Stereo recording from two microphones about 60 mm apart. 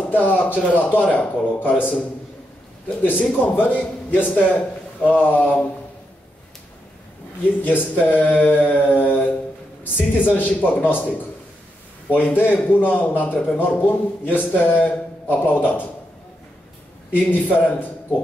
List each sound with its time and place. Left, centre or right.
0.1 s a man's voice: left
3.0 s a man's voice: left
7.6 s a man's voice: left
12.1 s a man's voice: left
17.1 s a man's voice: left